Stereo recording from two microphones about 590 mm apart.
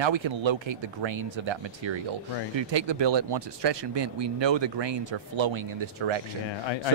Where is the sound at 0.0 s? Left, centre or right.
Right.